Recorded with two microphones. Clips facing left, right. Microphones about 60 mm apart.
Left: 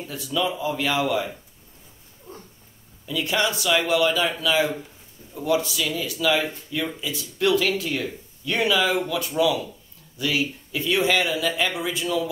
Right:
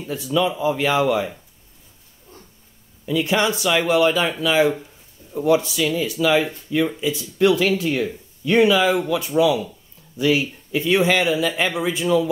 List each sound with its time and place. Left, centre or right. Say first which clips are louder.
0.1 s speech: right 5 dB; right
3.1 s speech: right 4 dB; right